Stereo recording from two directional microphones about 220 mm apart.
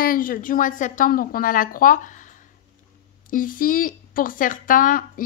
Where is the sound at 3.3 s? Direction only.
40° left (ahead or behind).